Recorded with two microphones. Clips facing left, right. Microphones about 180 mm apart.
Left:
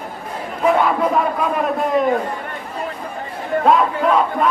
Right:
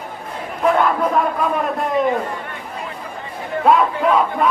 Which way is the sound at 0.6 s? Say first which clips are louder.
Even; centre (ahead or behind).